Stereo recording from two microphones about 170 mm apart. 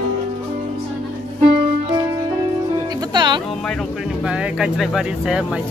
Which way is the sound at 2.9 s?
25° right (ahead or behind).